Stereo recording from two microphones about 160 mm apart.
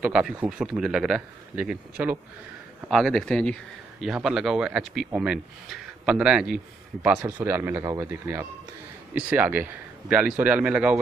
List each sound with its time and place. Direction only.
0.0 s speech: 10° right (ahead or behind)